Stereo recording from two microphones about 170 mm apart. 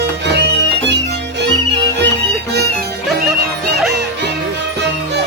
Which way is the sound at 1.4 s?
90° right.